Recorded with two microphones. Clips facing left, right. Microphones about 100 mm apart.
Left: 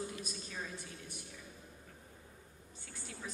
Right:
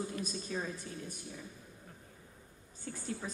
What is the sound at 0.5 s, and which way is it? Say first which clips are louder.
Speech: right 7 dB; 40° right (ahead or behind).